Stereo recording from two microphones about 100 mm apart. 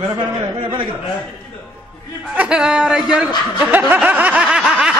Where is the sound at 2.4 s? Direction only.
10° right (ahead or behind).